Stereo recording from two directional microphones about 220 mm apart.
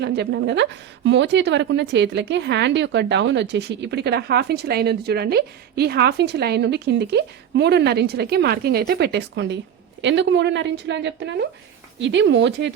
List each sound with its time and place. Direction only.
0.0 s a woman's voice: 50° right (ahead or behind)